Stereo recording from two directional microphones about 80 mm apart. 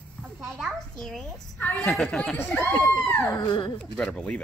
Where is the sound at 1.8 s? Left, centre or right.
Centre.